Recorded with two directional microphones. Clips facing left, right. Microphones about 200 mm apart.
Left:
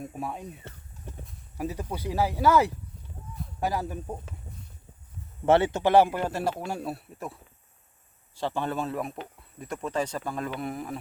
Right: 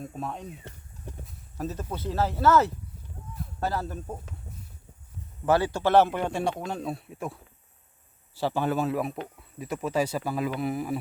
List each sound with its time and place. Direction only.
0.0 s speech: 10° left (ahead or behind)
1.5 s speech: 10° left (ahead or behind)
5.5 s a man's voice: 25° left (ahead or behind); by 7.3 s centre (ahead or behind)
8.4 s a man's voice: 5° right (ahead or behind)